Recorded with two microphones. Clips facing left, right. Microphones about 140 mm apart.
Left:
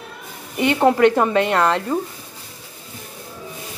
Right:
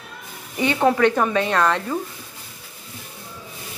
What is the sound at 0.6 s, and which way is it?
A woman's voice, 20° left (ahead or behind).